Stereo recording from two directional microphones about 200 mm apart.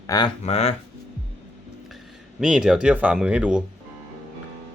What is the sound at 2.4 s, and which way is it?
Speech, 5° right (ahead or behind).